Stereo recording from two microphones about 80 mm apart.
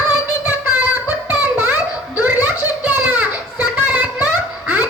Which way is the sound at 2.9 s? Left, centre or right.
Centre.